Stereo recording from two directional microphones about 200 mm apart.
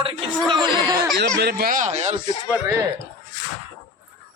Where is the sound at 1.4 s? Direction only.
50° right (ahead or behind); by 2.2 s 35° right (ahead or behind).